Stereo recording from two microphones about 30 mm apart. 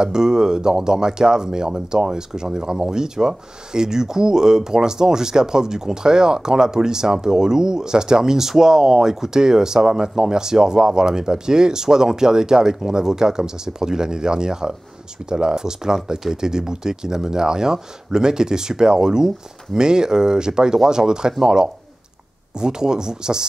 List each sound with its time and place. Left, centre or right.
0.0 s speech: right
22.6 s speech: right